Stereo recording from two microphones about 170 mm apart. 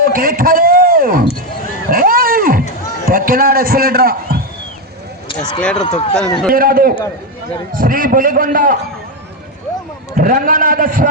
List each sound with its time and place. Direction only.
0.0 s speech: 60° right (ahead or behind)
1.9 s a sound: 60° right (ahead or behind)
3.1 s a man's voice: 60° right (ahead or behind)
5.3 s speech: 25° left (ahead or behind)
6.5 s a man's voice: 60° right (ahead or behind)
10.2 s a man's voice: 55° right (ahead or behind)